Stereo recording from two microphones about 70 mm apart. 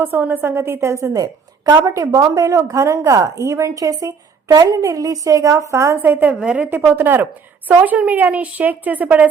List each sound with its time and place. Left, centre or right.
0.0 s a woman's voice: right
6.0 s a woman's voice: right